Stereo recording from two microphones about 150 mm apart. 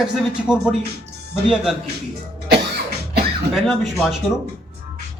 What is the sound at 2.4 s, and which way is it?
Cough, 90° right.